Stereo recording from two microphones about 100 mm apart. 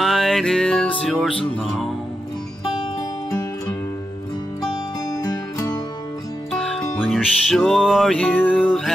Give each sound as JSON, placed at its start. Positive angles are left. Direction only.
{"t": 0.0, "sound": "music", "side_deg": 0}
{"t": 5.1, "sound": "music", "side_deg": 40}
{"t": 6.5, "sound": "music", "side_deg": 5}
{"t": 8.2, "sound": "music", "side_deg": 10}